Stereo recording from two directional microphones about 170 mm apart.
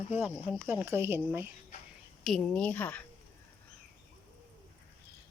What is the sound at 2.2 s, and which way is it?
Speech, 5° left (ahead or behind).